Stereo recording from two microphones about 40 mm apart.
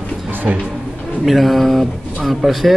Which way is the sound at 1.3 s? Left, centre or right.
Centre.